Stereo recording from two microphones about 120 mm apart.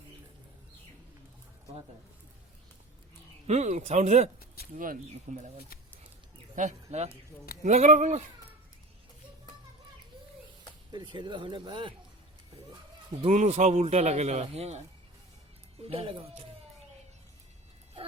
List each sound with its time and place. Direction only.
3.4 s a man's voice: 75° right (ahead or behind)
5.3 s a man's voice: 80° right
6.6 s a man's voice: 80° right
10.9 s speech: 40° right (ahead or behind)
13.2 s a man's voice: 70° right (ahead or behind); by 16.2 s 55° right (ahead or behind)